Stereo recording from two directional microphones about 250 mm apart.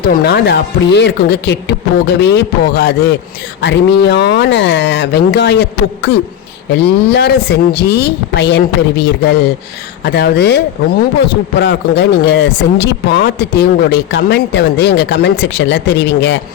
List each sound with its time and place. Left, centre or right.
0.1 s speech: left
11.6 s speech: left